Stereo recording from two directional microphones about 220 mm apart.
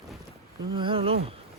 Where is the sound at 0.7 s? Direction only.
25° right (ahead or behind).